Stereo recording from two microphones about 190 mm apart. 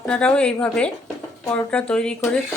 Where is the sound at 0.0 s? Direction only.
5° left (ahead or behind).